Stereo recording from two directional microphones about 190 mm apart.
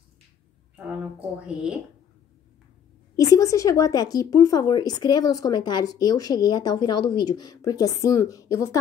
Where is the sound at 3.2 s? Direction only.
15° left (ahead or behind).